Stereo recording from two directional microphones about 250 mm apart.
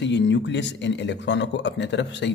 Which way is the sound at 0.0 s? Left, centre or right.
Left.